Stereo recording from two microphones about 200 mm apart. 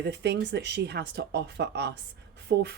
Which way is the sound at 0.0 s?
55° right (ahead or behind).